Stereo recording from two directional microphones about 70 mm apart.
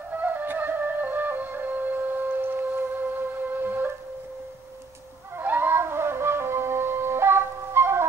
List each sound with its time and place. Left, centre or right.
0.1 s music: right
5.4 s music: right